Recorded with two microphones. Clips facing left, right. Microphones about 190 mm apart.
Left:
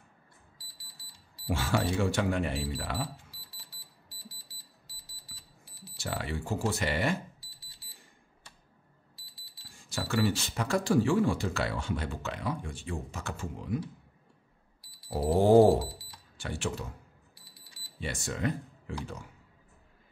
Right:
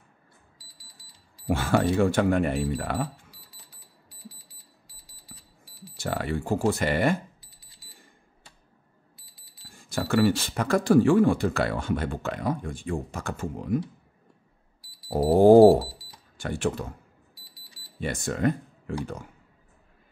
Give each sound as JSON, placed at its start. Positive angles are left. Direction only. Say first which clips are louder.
{"t": 1.5, "sound": "speech", "louder": "right 6 dB", "side_deg": -55}
{"t": 4.4, "sound": "a sound", "louder": "right 1 dB", "side_deg": -15}
{"t": 5.9, "sound": "speech", "louder": "right 6 dB", "side_deg": -55}
{"t": 9.8, "sound": "speech", "louder": "right 7 dB", "side_deg": -55}
{"t": 15.0, "sound": "speech", "louder": "right 7 dB", "side_deg": -40}
{"t": 18.0, "sound": "speech", "louder": "right 7 dB", "side_deg": -55}